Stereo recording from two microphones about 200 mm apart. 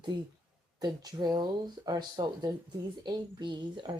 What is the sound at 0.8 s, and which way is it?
Speech, 20° right (ahead or behind).